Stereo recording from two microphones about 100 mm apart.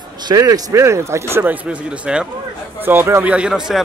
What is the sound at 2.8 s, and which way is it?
Speech, 20° right (ahead or behind).